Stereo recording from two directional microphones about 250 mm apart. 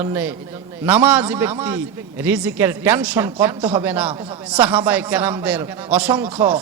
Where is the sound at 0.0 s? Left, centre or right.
Centre.